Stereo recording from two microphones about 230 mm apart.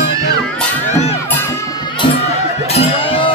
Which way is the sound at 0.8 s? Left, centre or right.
Left.